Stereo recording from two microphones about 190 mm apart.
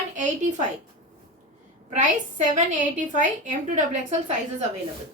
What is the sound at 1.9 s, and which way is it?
A woman's voice, 40° right (ahead or behind).